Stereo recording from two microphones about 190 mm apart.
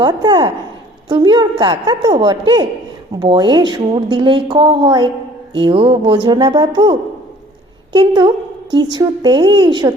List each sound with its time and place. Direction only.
0.0 s speech: 20° right (ahead or behind)
7.9 s speech: 25° right (ahead or behind)